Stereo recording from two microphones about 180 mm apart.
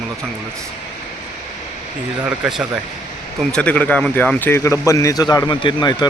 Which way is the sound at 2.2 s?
5° right (ahead or behind).